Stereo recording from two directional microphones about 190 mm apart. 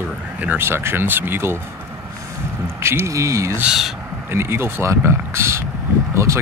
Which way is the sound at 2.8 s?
15° right (ahead or behind).